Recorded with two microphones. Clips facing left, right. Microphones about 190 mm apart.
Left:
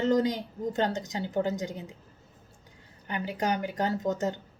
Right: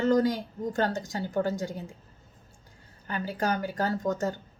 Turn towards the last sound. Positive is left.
turn(degrees=20)  # may be behind; listen again after turning